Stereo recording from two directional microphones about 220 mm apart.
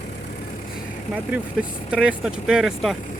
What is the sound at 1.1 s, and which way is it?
Speech, 5° right (ahead or behind).